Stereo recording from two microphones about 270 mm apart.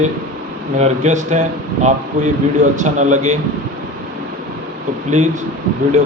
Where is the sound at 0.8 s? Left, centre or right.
Right.